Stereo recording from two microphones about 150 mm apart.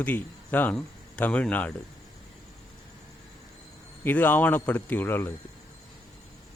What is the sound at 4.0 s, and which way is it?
Speech, 10° left (ahead or behind).